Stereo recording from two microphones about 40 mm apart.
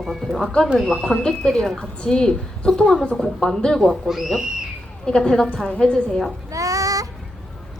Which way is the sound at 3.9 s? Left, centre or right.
Centre.